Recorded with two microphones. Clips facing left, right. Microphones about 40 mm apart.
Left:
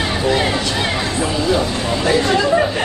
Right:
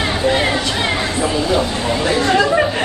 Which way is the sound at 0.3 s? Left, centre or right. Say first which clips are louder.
Even; right.